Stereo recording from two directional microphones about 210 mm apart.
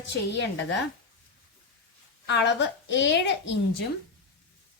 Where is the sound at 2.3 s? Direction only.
55° left (ahead or behind).